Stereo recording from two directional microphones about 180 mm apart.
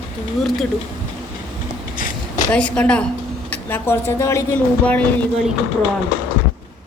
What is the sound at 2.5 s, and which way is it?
Speech, 5° left (ahead or behind).